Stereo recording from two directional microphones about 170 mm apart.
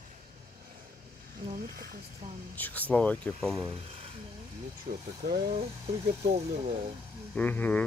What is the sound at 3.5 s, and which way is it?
Speech, 30° right (ahead or behind).